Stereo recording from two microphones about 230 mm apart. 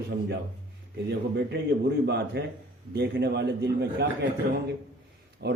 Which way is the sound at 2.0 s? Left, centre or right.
Right.